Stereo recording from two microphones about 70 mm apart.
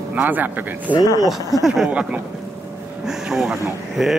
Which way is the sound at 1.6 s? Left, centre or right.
Centre.